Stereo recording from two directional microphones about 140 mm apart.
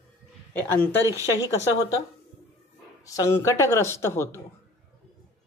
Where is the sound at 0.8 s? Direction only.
20° right (ahead or behind).